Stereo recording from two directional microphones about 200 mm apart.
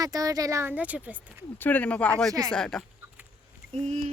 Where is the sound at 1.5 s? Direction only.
10° left (ahead or behind).